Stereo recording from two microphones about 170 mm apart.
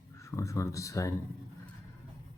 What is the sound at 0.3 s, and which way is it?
Speech, 20° left (ahead or behind).